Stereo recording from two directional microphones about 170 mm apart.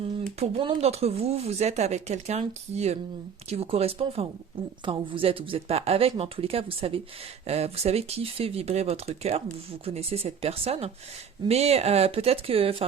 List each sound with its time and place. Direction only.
0.3 s speech: 35° right (ahead or behind)